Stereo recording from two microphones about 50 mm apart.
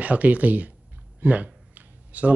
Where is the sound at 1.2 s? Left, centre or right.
Right.